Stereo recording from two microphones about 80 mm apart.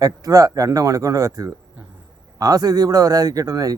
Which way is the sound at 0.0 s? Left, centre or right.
Right.